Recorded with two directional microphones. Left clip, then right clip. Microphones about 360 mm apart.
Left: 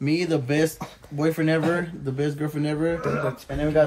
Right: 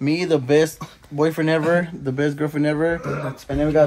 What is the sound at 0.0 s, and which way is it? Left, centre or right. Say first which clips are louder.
A man's voice: right 4 dB; centre.